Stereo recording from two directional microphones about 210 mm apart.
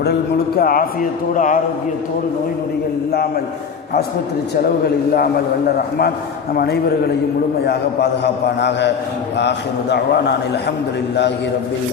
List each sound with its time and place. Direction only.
0.5 s a man's voice: 45° left (ahead or behind)
3.1 s a man's voice: 50° left (ahead or behind)
5.1 s a man's voice: 45° left (ahead or behind)